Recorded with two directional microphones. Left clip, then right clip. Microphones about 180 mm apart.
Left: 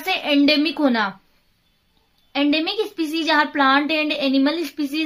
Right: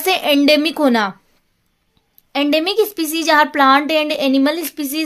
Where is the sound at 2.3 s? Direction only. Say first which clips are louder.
Right 5 dB; 50° right (ahead or behind).